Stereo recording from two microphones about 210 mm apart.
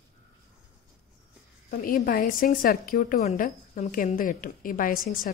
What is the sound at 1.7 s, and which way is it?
A woman's voice, 45° left (ahead or behind).